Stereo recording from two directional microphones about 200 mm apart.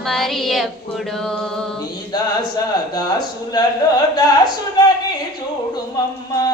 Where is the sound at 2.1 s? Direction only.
20° left (ahead or behind).